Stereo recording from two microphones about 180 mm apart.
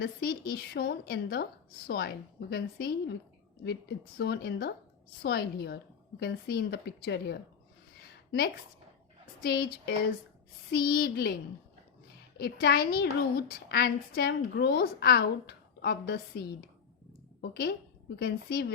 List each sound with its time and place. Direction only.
0.0 s a woman's voice: 60° left (ahead or behind)
9.4 s a woman's voice: 60° left (ahead or behind)
12.4 s a woman's voice: 60° left (ahead or behind)